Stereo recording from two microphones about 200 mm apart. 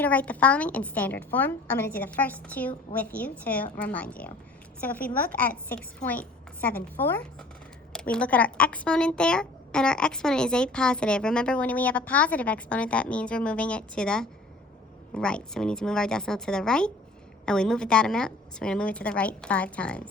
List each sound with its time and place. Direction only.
0.0 s a woman's voice: 5° left (ahead or behind)